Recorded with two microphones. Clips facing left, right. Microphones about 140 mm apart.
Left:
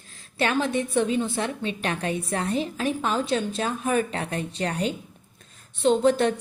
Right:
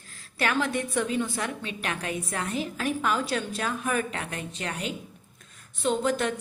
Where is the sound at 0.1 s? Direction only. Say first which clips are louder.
Left 3 dB; 25° left (ahead or behind).